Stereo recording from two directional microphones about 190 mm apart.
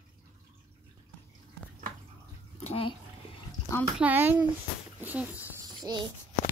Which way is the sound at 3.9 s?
10° right (ahead or behind).